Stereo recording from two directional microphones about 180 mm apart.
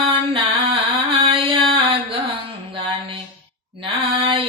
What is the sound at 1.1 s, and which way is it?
Chant, 30° right (ahead or behind).